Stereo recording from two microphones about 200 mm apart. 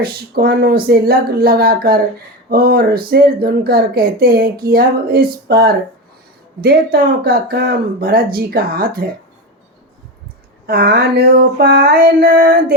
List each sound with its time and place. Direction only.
0.0 s speech: 50° right (ahead or behind)
10.7 s speech: 50° right (ahead or behind)